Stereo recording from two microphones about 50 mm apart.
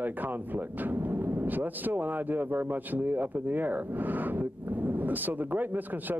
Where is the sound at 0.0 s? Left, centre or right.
Right.